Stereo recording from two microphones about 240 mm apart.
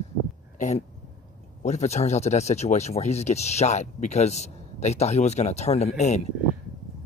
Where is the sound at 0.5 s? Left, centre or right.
Left.